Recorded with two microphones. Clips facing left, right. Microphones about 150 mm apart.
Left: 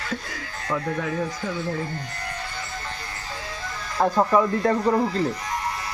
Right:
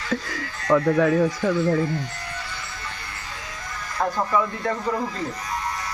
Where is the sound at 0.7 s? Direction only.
80° right.